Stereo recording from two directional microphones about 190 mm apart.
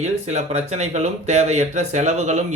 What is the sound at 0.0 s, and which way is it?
Speech, 35° right (ahead or behind).